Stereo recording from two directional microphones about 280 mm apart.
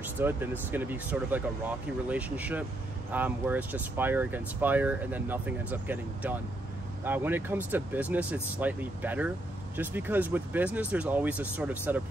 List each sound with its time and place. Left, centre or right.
0.0 s speech: centre